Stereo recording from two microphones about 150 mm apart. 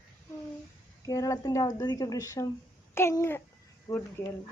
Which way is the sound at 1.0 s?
25° left (ahead or behind).